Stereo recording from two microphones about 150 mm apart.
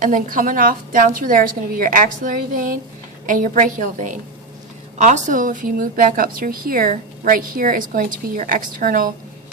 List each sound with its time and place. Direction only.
0.0 s a woman's voice: 65° right (ahead or behind)